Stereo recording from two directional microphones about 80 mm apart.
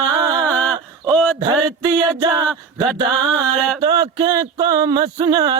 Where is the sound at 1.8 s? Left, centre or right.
Right.